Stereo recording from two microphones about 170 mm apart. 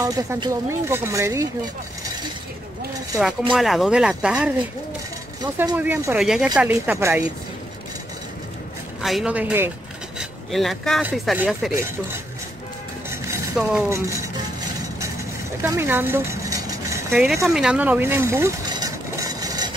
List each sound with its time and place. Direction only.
0.0 s speech: 20° right (ahead or behind)
3.5 s speech: centre (ahead or behind)
5.8 s speech: 10° right (ahead or behind)
9.0 s speech: 5° right (ahead or behind)
10.1 s a sound: centre (ahead or behind)
11.2 s speech: centre (ahead or behind)
11.7 s speech: 15° right (ahead or behind)
13.6 s speech: 5° right (ahead or behind)
13.8 s speech: 15° right (ahead or behind)
15.6 s a sound: 15° right (ahead or behind)
17.6 s vehicle: 5° right (ahead or behind); by 19.7 s 20° right (ahead or behind)